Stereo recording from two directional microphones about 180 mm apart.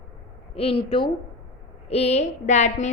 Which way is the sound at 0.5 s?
30° left (ahead or behind).